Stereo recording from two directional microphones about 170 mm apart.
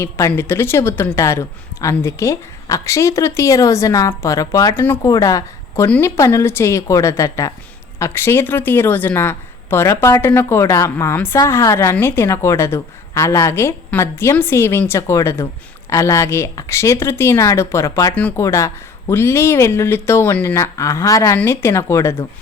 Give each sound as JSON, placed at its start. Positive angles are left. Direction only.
{"t": 0.0, "sound": "speech", "side_deg": 15}